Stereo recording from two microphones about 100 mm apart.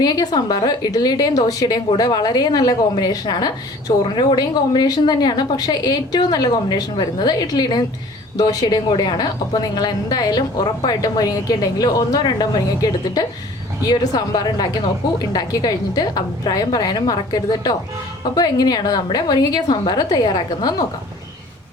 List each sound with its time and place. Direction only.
0.0 s a woman's voice: 40° left (ahead or behind)